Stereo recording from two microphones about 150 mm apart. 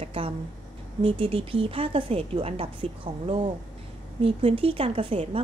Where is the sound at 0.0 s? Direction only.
40° right (ahead or behind).